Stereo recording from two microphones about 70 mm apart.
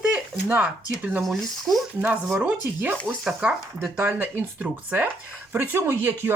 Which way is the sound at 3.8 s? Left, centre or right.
Right.